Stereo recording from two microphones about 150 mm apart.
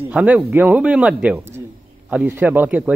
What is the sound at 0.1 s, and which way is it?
A man's voice, 10° right (ahead or behind).